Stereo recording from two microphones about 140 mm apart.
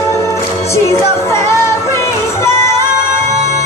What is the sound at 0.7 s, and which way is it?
Music, 20° left (ahead or behind).